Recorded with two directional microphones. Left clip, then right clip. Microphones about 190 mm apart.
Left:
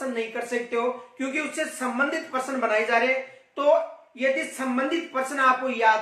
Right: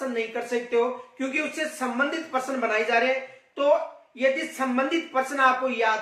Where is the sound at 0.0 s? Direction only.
Centre (ahead or behind).